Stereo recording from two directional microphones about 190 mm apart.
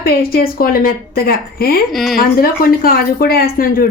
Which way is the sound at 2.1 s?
50° left (ahead or behind).